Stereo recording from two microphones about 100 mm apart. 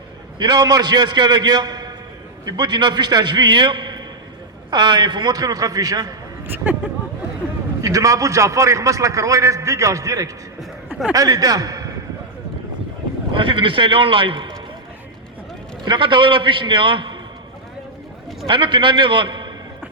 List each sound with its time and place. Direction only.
0.3 s a man's voice: 40° right (ahead or behind)
7.8 s a man's voice: 35° right (ahead or behind)
13.3 s a man's voice: 60° right (ahead or behind)
15.8 s a man's voice: 55° right (ahead or behind)
18.4 s a man's voice: 55° right (ahead or behind)